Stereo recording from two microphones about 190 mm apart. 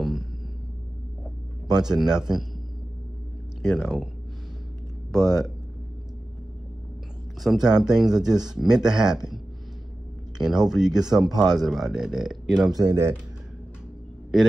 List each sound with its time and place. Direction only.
1.8 s speech: 5° right (ahead or behind)
3.7 s speech: centre (ahead or behind)
5.1 s speech: centre (ahead or behind)
7.4 s speech: 5° right (ahead or behind)
12.7 s speech: 20° right (ahead or behind)